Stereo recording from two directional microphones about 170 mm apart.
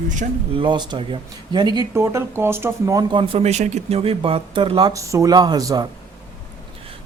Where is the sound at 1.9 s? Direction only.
15° right (ahead or behind).